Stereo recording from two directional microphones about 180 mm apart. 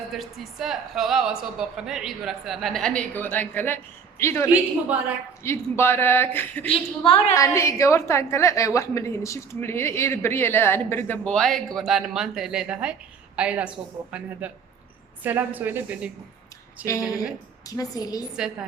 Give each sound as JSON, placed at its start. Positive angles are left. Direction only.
{"t": 0.1, "sound": "a woman's voice", "side_deg": 0}
{"t": 4.4, "sound": "a woman's voice", "side_deg": -10}
{"t": 5.4, "sound": "a woman's voice", "side_deg": 15}
{"t": 6.7, "sound": "a woman's voice", "side_deg": 30}
{"t": 7.3, "sound": "a woman's voice", "side_deg": 15}
{"t": 16.8, "sound": "a woman's voice", "side_deg": 20}